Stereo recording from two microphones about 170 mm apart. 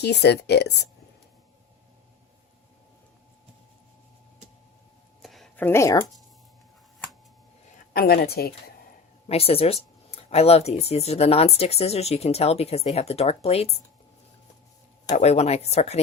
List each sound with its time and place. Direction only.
0.0 s speech: 75° left (ahead or behind)
5.2 s a sound: centre (ahead or behind)
5.5 s speech: 15° left (ahead or behind)
7.9 s a woman's voice: 65° left (ahead or behind)
9.3 s speech: 35° left (ahead or behind)
15.1 s speech: 40° left (ahead or behind)